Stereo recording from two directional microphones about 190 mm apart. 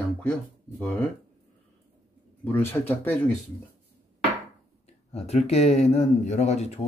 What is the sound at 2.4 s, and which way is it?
Speech, 10° left (ahead or behind).